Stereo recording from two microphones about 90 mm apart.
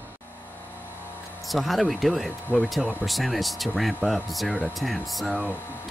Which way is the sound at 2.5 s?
20° left (ahead or behind).